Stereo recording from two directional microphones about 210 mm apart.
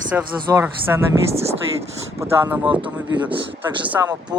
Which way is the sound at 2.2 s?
10° right (ahead or behind).